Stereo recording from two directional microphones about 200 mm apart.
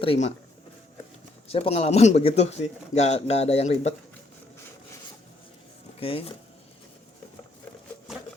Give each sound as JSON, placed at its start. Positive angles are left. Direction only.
{"t": 0.0, "sound": "a man's voice", "side_deg": 30}
{"t": 1.5, "sound": "a man's voice", "side_deg": 30}
{"t": 6.0, "sound": "speech", "side_deg": 30}